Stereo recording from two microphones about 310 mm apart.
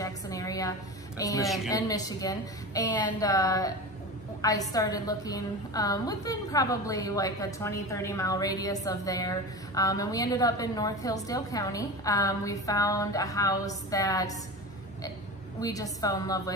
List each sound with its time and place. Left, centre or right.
0.0 s a sound: centre
1.7 s a woman's voice: centre
15.6 s a woman's voice: centre